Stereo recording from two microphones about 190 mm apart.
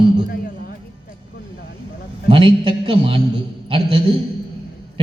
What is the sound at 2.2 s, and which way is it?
Speech, 25° right (ahead or behind).